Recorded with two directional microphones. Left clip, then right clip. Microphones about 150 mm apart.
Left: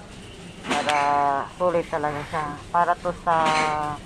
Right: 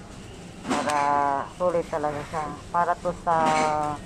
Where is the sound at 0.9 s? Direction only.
15° left (ahead or behind).